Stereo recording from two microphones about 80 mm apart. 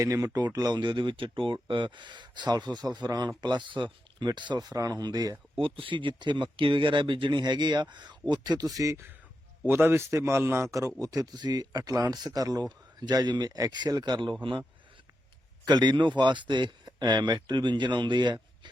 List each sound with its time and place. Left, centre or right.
0.0 s speech: right
4.2 s speech: right
5.5 s speech: right
8.3 s speech: right
9.6 s a man's voice: right
11.0 s speech: right
15.6 s speech: right